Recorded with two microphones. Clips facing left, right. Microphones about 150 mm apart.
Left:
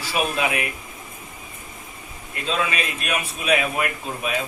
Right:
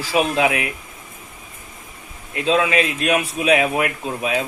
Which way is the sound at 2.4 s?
85° right.